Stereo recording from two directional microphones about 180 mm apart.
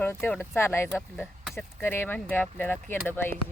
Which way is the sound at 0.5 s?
15° left (ahead or behind).